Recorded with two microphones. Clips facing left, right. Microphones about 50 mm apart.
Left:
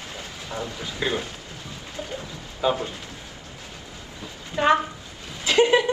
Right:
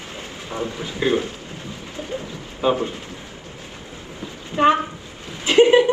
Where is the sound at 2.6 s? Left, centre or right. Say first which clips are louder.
Right 4 dB; right.